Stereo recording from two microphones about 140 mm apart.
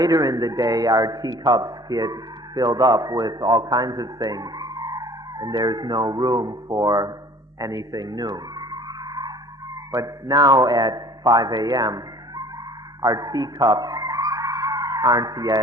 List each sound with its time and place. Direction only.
0.0 s a man's voice: 25° right (ahead or behind)
7.6 s music: 25° right (ahead or behind)
9.9 s speech: 25° right (ahead or behind)
13.0 s music: 25° right (ahead or behind)